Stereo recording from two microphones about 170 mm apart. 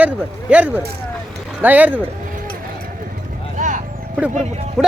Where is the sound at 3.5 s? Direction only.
50° right (ahead or behind).